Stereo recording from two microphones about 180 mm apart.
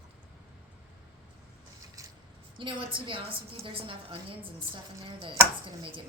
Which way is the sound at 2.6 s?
30° right (ahead or behind).